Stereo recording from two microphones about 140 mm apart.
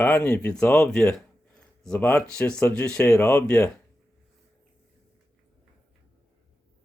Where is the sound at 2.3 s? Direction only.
5° left (ahead or behind).